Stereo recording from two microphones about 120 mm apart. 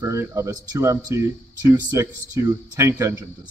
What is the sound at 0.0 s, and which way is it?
Speech, 25° right (ahead or behind).